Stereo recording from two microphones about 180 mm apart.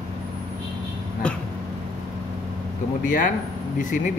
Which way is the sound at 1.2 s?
5° left (ahead or behind).